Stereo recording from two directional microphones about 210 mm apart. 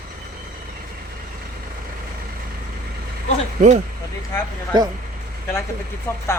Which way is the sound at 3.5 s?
35° right (ahead or behind).